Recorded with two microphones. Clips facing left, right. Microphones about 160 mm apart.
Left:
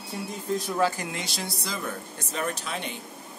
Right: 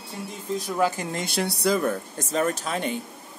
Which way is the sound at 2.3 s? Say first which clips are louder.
Right 6 dB; 45° right (ahead or behind).